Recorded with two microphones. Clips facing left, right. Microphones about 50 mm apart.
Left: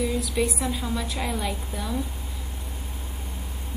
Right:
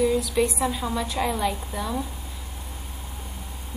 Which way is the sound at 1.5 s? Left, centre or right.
Right.